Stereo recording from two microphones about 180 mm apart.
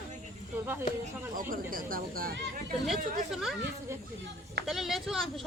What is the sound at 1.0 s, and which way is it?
Speech, 50° right (ahead or behind).